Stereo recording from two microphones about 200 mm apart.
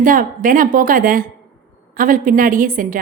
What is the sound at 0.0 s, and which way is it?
A woman's voice, 40° right (ahead or behind).